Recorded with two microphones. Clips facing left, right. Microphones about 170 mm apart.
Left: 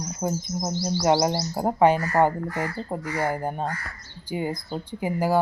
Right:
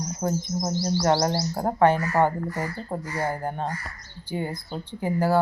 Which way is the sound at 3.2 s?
15° left (ahead or behind).